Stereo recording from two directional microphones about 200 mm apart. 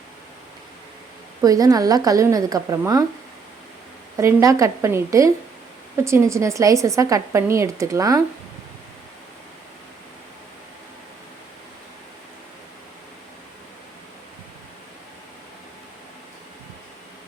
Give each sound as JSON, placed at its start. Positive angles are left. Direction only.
{"t": 1.4, "sound": "speech", "side_deg": -15}
{"t": 4.2, "sound": "speech", "side_deg": -15}